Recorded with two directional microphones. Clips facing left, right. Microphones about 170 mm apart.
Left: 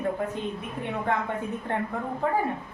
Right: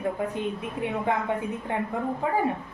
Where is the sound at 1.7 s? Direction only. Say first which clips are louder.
Even; 10° right (ahead or behind).